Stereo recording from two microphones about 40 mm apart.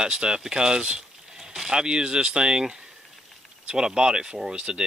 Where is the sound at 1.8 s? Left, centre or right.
Right.